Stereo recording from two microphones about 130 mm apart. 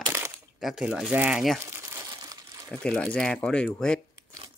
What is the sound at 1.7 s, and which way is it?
Crumpling, 20° right (ahead or behind).